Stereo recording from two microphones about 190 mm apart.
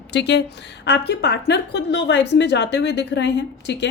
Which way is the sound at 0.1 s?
65° left (ahead or behind).